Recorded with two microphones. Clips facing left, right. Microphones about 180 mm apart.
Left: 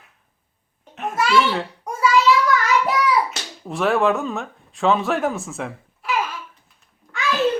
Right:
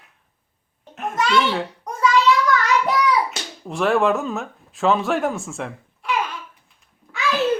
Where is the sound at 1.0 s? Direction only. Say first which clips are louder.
Left 1 dB; 5° left (ahead or behind).